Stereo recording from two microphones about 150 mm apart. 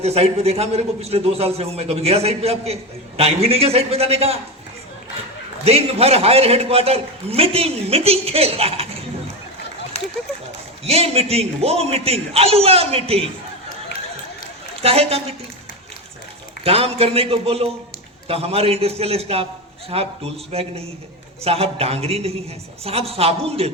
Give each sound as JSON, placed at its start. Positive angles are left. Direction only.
{"t": 0.0, "sound": "a man's voice", "side_deg": -45}
{"t": 5.6, "sound": "a man's voice", "side_deg": -45}
{"t": 10.0, "sound": "run", "side_deg": 45}
{"t": 10.8, "sound": "a man's voice", "side_deg": -40}
{"t": 14.8, "sound": "a man's voice", "side_deg": -40}
{"t": 16.6, "sound": "a man's voice", "side_deg": -40}